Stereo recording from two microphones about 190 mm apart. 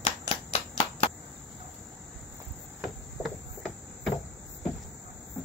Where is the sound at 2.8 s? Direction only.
Centre (ahead or behind).